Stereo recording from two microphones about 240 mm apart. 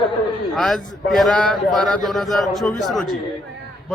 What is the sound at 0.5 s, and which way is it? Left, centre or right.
Speech, centre.